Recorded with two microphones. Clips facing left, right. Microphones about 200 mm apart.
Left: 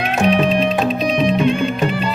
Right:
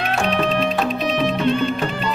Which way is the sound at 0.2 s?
15° left (ahead or behind).